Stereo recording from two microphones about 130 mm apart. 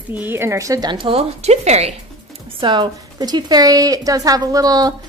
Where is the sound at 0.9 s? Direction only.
45° right (ahead or behind).